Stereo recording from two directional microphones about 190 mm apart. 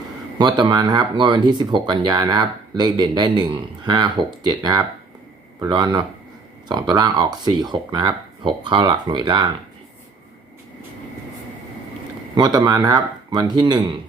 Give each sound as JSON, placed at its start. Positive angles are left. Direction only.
{"t": 0.3, "sound": "speech", "side_deg": -20}
{"t": 12.3, "sound": "speech", "side_deg": -20}